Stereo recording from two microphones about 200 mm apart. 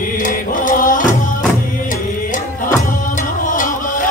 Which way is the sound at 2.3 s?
40° left (ahead or behind).